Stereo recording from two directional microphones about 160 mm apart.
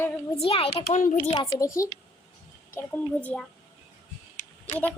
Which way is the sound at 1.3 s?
25° left (ahead or behind).